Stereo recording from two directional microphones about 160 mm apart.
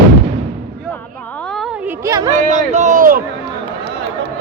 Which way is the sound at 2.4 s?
50° right (ahead or behind).